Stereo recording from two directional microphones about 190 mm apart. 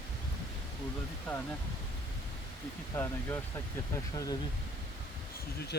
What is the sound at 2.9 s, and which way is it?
Speech, 15° left (ahead or behind).